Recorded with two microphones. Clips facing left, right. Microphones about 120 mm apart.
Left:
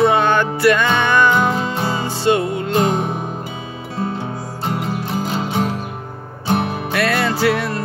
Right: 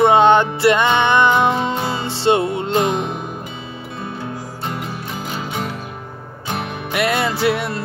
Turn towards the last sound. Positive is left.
turn(degrees=-25)  # may be behind; listen again after turning